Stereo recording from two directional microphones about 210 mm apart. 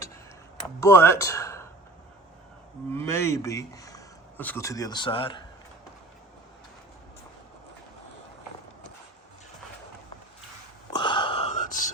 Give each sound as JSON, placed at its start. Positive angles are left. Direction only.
{"t": 0.8, "sound": "speech", "side_deg": 10}
{"t": 2.9, "sound": "speech", "side_deg": 10}
{"t": 10.9, "sound": "whispering", "side_deg": 20}